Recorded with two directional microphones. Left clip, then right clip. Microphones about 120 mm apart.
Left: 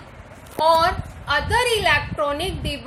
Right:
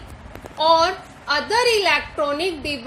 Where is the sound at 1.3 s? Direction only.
40° right (ahead or behind).